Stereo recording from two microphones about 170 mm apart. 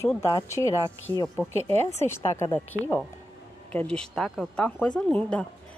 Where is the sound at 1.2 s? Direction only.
Centre (ahead or behind).